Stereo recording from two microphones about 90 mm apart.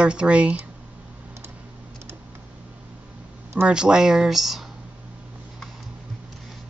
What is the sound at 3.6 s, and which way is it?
Speech, 10° right (ahead or behind).